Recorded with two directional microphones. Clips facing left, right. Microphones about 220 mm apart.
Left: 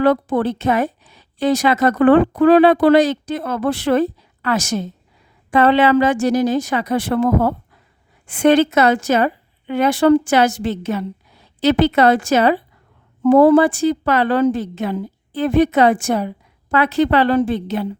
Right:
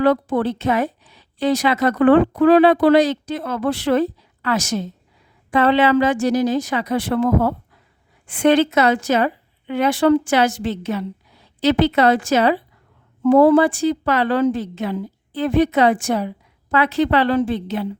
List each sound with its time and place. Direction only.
0.0 s a woman's voice: 50° left (ahead or behind)